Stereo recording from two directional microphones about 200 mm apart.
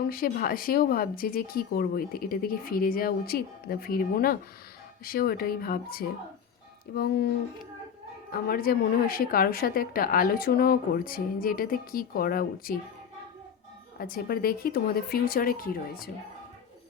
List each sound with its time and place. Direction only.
0.0 s a woman's voice: 50° left (ahead or behind)
8.3 s a woman's voice: 45° left (ahead or behind)
14.0 s a woman's voice: 50° left (ahead or behind)